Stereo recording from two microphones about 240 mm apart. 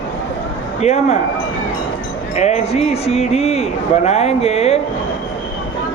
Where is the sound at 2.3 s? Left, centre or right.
Left.